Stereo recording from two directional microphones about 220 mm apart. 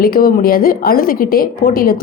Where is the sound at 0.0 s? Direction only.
40° left (ahead or behind).